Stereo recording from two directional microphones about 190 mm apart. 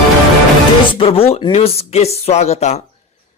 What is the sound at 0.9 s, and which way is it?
Speech, 30° left (ahead or behind).